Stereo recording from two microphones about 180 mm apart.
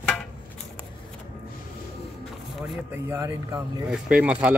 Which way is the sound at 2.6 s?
5° right (ahead or behind).